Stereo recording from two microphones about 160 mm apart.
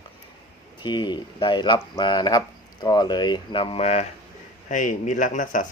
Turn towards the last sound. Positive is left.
turn(degrees=50)  # may be behind; listen again after turning